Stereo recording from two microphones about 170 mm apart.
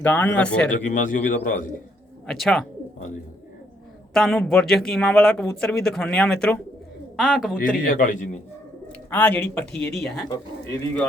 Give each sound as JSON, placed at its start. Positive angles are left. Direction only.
{"t": 0.0, "sound": "speech", "side_deg": 10}
{"t": 0.7, "sound": "a man's voice", "side_deg": 50}
{"t": 2.2, "sound": "speech", "side_deg": 0}
{"t": 4.1, "sound": "speech", "side_deg": 0}
{"t": 7.9, "sound": "a man's voice", "side_deg": 50}
{"t": 8.9, "sound": "speech", "side_deg": 10}
{"t": 10.2, "sound": "speech", "side_deg": 20}